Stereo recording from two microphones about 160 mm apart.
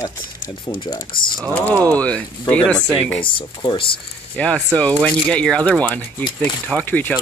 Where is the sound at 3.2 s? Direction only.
30° left (ahead or behind).